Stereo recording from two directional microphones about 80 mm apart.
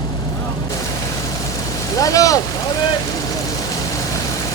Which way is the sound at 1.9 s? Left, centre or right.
Left.